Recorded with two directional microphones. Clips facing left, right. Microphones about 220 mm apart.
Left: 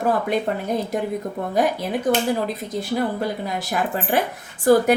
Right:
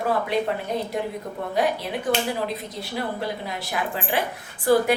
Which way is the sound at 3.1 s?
45° left (ahead or behind).